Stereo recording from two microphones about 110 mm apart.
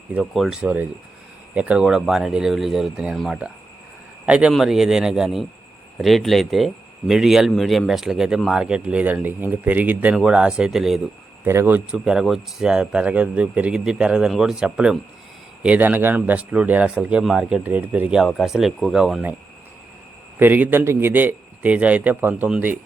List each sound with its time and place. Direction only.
0.3 s speech: centre (ahead or behind)
0.6 s a man's voice: 10° right (ahead or behind)
11.4 s speech: 20° right (ahead or behind)
12.0 s a man's voice: 5° right (ahead or behind)
18.2 s speech: centre (ahead or behind)
20.4 s a man's voice: 15° right (ahead or behind)